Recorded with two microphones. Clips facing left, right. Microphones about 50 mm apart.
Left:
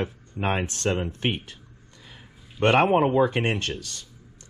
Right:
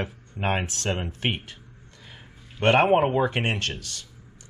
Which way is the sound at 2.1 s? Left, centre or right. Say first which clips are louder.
Right 1 dB; centre.